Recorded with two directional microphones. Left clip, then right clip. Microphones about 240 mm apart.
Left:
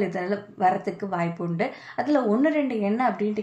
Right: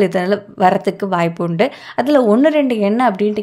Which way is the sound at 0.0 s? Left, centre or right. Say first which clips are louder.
Right 11 dB; right.